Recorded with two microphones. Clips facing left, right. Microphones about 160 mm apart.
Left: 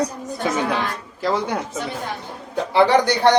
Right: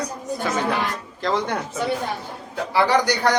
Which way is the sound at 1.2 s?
10° left (ahead or behind).